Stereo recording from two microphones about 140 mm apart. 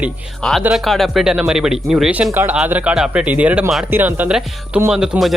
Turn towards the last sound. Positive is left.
turn(degrees=0)  # may be behind; listen again after turning